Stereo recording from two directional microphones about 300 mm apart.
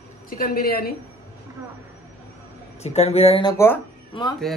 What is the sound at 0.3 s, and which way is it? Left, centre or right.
Speech, left.